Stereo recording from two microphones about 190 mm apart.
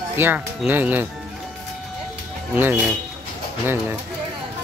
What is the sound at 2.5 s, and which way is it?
Speech, 10° right (ahead or behind).